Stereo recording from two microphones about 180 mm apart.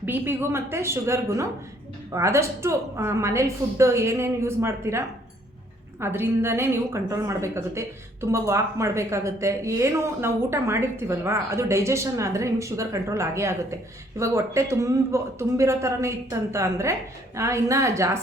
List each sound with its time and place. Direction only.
0.0 s a woman's voice: 10° right (ahead or behind)